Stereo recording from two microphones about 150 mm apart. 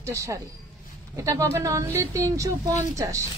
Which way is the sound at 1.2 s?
20° right (ahead or behind).